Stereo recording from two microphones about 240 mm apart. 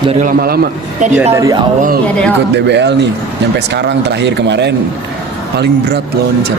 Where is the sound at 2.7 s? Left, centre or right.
Right.